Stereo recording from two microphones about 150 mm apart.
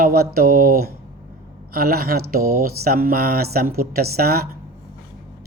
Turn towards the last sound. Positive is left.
turn(degrees=-90)